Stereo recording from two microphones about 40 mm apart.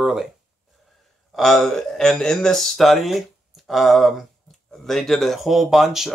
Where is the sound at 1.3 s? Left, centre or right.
Centre.